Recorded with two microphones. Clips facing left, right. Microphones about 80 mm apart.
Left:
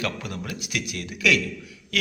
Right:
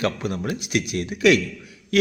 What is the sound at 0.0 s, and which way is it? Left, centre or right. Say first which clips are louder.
A man's voice: right 6 dB; right.